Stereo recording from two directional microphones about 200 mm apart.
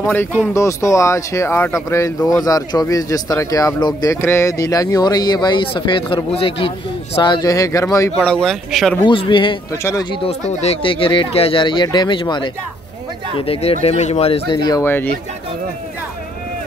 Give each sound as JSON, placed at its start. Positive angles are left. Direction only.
{"t": 0.0, "sound": "speech", "side_deg": 10}
{"t": 8.3, "sound": "speech", "side_deg": 5}
{"t": 9.0, "sound": "speech", "side_deg": 25}
{"t": 14.7, "sound": "speech", "side_deg": 10}